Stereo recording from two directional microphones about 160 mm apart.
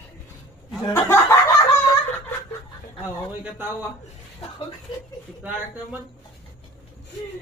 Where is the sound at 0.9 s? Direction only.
15° left (ahead or behind).